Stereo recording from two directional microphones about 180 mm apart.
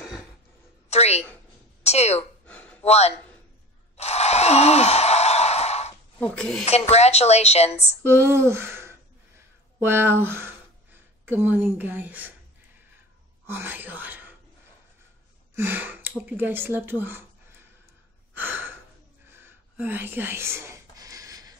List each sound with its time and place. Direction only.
0.8 s a sound: 35° left (ahead or behind)
1.8 s a woman's voice: 35° left (ahead or behind)
2.4 s gasp: 5° left (ahead or behind)
2.8 s a woman's voice: 35° left (ahead or behind)
3.9 s sigh: 35° left (ahead or behind)
6.1 s speech: 5° left (ahead or behind)
6.6 s a woman's voice: 35° left (ahead or behind)
8.0 s speech: 15° right (ahead or behind)
13.5 s speech: 10° right (ahead or behind)
15.5 s speech: 10° right (ahead or behind)
18.3 s gasp: 10° right (ahead or behind)
19.2 s a sound: 15° right (ahead or behind)